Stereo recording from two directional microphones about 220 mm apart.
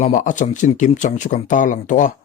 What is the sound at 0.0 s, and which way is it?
Speech, 35° left (ahead or behind).